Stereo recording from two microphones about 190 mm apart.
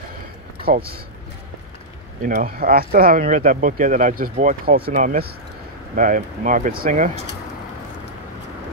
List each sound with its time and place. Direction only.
2.2 s speech: 45° right (ahead or behind)